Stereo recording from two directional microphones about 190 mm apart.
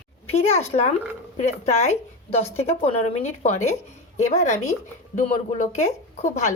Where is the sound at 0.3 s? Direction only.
35° left (ahead or behind).